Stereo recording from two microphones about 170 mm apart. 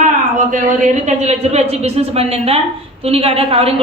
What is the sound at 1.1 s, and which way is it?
Speech, 40° right (ahead or behind).